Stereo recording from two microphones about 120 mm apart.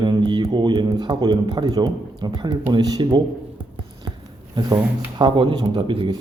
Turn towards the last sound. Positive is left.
turn(degrees=-45)  # may be behind; listen again after turning